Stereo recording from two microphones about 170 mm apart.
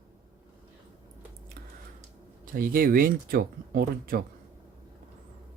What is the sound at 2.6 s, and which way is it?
Speech, 55° right (ahead or behind).